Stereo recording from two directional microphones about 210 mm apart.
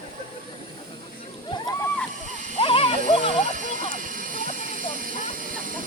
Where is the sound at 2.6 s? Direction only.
25° left (ahead or behind).